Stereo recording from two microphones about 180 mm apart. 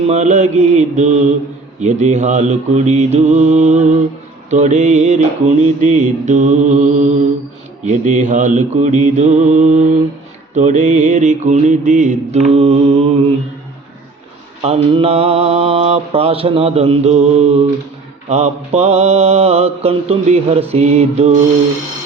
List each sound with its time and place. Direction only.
0.1 s mantra: 40° right (ahead or behind)
14.6 s mantra: 35° right (ahead or behind)